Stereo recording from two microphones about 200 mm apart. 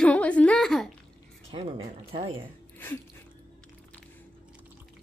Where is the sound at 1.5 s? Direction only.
30° right (ahead or behind).